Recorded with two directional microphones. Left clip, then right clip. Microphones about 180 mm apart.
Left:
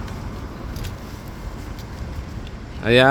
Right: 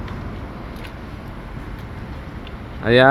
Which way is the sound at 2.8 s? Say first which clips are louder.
Right 1 dB; 10° left (ahead or behind).